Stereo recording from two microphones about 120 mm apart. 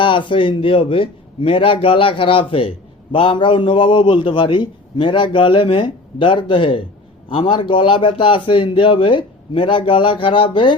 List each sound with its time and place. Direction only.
0.0 s a man's voice: 45° left (ahead or behind)